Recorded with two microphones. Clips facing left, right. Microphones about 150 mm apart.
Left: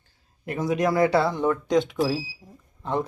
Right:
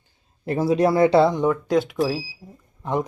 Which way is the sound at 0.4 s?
30° right (ahead or behind).